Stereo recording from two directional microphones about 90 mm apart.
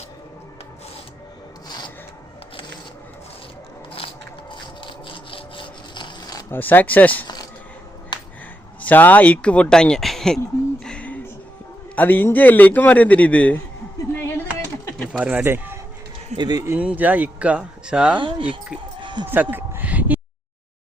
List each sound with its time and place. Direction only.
4.5 s wood: 60° left (ahead or behind)
6.5 s speech: 20° left (ahead or behind)
8.1 s a sound: 55° left (ahead or behind)
8.8 s a man's voice: 20° left (ahead or behind)
10.8 s a sound: 15° left (ahead or behind)
11.9 s a man's voice: 20° left (ahead or behind)
14.1 s a sound: 25° left (ahead or behind)
15.2 s speech: 15° right (ahead or behind)
16.4 s speech: 45° right (ahead or behind)
16.7 s speech: 15° right (ahead or behind)
18.2 s speech: 65° right (ahead or behind)
19.3 s a sound: 20° right (ahead or behind)